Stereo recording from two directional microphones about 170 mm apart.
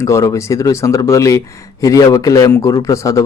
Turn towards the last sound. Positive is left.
turn(degrees=20)  # may be behind; listen again after turning